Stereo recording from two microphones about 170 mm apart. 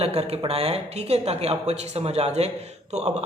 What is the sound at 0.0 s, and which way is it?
Speech, 35° right (ahead or behind).